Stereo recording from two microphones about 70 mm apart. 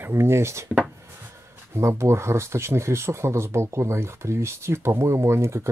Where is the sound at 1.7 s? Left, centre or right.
Right.